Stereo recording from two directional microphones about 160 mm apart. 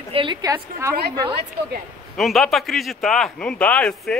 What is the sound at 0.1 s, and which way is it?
Speech, 30° right (ahead or behind).